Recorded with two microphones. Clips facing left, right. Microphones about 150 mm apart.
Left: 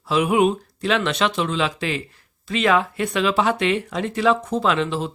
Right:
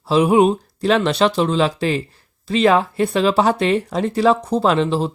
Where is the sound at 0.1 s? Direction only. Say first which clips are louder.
Right 4 dB; 35° right (ahead or behind).